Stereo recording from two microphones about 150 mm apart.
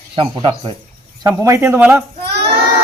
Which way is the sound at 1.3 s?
20° right (ahead or behind).